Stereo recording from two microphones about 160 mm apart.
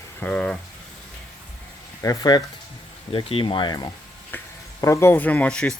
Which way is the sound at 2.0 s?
20° left (ahead or behind).